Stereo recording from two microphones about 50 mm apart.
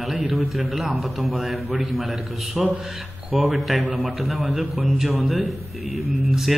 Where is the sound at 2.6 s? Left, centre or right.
Centre.